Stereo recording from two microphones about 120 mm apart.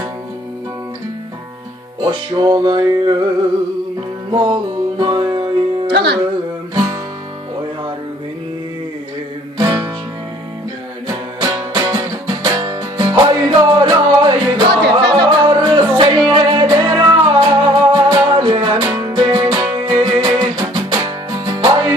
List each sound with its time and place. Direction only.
2.0 s music: 40° right (ahead or behind)
4.3 s music: 40° right (ahead or behind)
6.7 s guitar: 30° right (ahead or behind)
9.6 s music: 30° right (ahead or behind)
11.3 s music: 35° right (ahead or behind)